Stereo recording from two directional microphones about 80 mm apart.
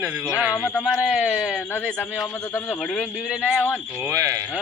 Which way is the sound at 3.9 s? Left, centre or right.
Right.